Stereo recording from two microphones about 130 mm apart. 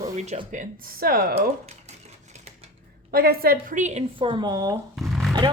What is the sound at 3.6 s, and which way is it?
Speech, 70° right (ahead or behind).